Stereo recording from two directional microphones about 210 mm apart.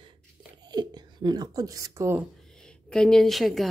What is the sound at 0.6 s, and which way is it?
Speech, 20° right (ahead or behind).